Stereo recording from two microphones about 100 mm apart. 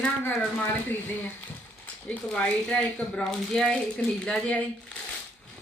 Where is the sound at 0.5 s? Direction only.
20° left (ahead or behind).